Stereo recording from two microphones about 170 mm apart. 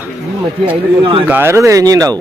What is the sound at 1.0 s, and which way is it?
Speech, 30° right (ahead or behind).